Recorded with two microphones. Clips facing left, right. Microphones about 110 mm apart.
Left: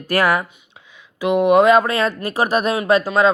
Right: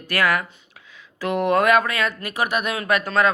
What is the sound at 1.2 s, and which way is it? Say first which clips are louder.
Speech: left 6 dB; 15° left (ahead or behind).